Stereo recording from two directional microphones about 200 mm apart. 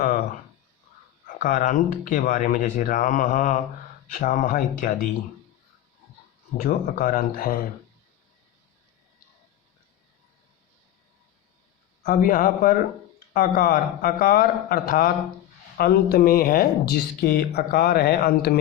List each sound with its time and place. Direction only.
1.3 s speech: 40° left (ahead or behind)
6.6 s speech: 45° left (ahead or behind)
12.0 s speech: 45° left (ahead or behind)